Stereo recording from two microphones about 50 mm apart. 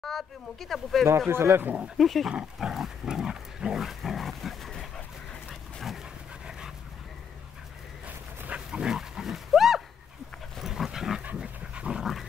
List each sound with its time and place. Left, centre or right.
0.0 s speech: centre
1.3 s speech: right
2.0 s speech: centre
2.2 s dog: centre
4.0 s dog: centre
8.5 s dog: centre
11.3 s dog: right
12.0 s dog: centre